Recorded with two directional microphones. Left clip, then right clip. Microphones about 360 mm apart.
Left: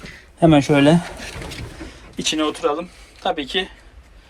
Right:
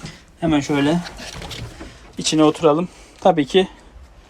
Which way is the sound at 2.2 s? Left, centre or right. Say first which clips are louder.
Right 5 dB; centre.